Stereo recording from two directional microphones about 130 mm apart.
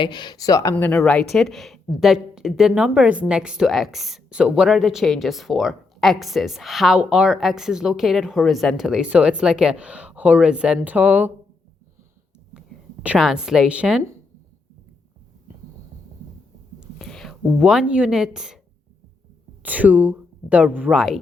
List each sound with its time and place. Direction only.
0.0 s a woman's voice: 35° left (ahead or behind); by 11.3 s 10° right (ahead or behind)
12.5 s speech: 5° right (ahead or behind)
17.0 s speech: 5° left (ahead or behind)
19.6 s speech: 10° right (ahead or behind)